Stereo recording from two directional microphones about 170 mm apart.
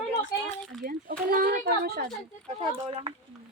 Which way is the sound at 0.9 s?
55° right (ahead or behind).